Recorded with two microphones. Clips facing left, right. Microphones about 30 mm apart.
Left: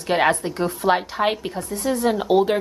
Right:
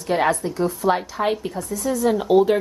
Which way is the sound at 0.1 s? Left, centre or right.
Left.